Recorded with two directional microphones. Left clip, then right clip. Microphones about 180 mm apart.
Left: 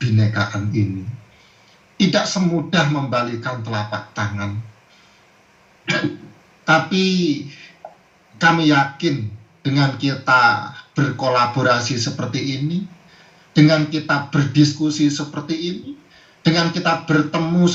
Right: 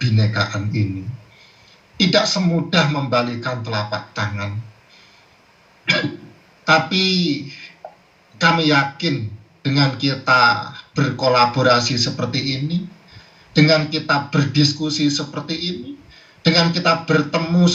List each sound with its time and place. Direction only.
0.0 s speech: 50° right (ahead or behind)
2.0 s speech: 50° right (ahead or behind)
6.7 s speech: 50° right (ahead or behind)